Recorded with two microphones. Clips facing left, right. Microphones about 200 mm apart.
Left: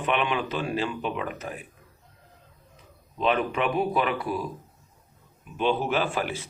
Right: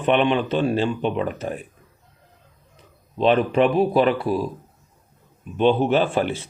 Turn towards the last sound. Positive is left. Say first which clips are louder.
# right 7 dB
turn(degrees=-25)  # may be behind; listen again after turning